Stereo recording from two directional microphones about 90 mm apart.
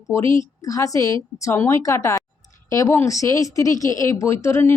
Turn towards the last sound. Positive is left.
turn(degrees=30)  # may be behind; listen again after turning